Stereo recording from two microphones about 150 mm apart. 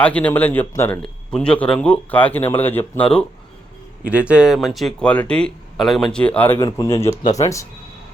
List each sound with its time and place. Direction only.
0.0 s speech: 10° left (ahead or behind)
1.0 s speech: 5° left (ahead or behind)
4.0 s speech: 10° right (ahead or behind); by 7.6 s 20° left (ahead or behind)